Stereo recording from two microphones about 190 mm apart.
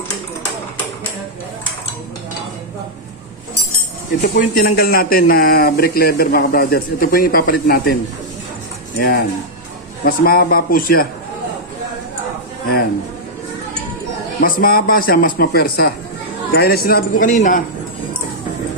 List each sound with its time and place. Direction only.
4.4 s speech: 50° left (ahead or behind)
9.0 s speech: 55° left (ahead or behind)
14.4 s speech: 50° left (ahead or behind)